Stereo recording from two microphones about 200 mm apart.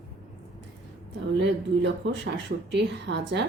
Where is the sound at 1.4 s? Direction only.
65° right (ahead or behind).